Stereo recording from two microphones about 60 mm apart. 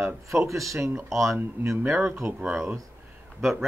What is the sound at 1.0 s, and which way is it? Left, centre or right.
Speech, centre.